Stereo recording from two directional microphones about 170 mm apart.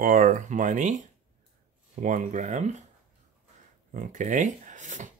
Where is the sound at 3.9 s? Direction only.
45° right (ahead or behind).